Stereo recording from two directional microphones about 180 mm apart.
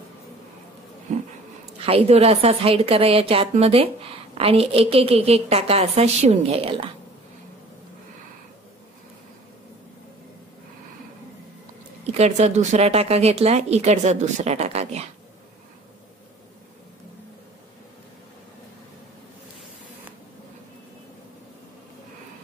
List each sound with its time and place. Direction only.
1.1 s a sound: 40° right (ahead or behind)
1.9 s speech: 35° right (ahead or behind)
12.1 s speech: 35° right (ahead or behind)